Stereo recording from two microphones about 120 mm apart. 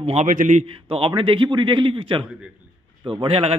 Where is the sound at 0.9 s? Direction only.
50° right (ahead or behind).